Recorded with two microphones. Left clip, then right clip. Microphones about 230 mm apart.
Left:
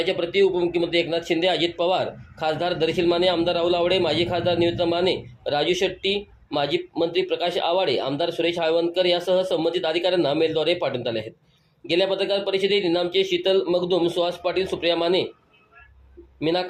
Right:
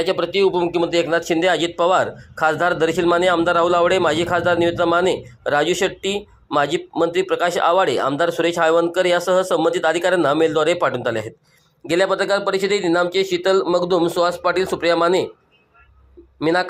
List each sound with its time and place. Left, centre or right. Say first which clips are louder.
0.0 s speech: right 3 dB; centre
12.5 s speech: right 2 dB; right
12.8 s speech: right 5 dB; centre
13.1 s speech: right 2 dB; right
13.5 s speech: right 6 dB; centre